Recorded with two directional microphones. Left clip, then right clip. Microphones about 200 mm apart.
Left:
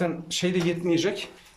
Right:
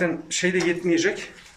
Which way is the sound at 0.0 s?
10° left (ahead or behind).